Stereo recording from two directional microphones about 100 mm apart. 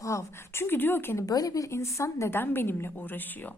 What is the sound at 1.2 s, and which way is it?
A woman's voice, 40° left (ahead or behind).